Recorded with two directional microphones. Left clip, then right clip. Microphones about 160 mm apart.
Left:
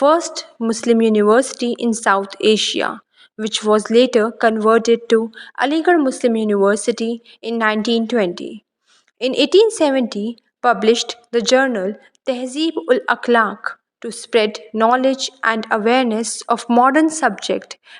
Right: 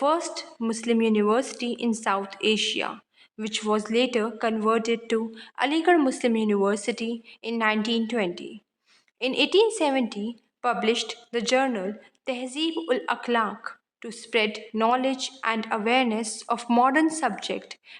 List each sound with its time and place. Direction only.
0.0 s a woman's voice: 30° left (ahead or behind)
16.6 s speech: 20° left (ahead or behind)
16.9 s a woman's voice: 30° left (ahead or behind)